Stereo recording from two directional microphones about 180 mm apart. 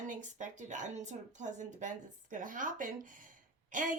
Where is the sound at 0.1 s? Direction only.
45° right (ahead or behind).